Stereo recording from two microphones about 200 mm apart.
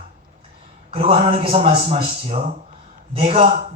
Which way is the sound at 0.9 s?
30° right (ahead or behind).